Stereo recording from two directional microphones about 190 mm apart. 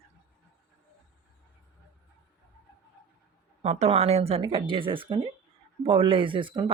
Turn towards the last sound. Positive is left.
turn(degrees=-25)  # may be behind; listen again after turning